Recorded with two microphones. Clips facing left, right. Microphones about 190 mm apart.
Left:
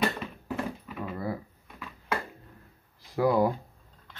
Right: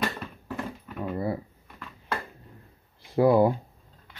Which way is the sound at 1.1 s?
30° right (ahead or behind).